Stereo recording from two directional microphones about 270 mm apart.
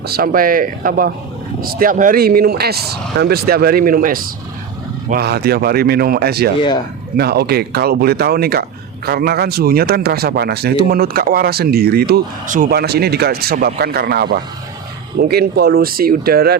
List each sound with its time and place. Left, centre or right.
0.1 s speech: right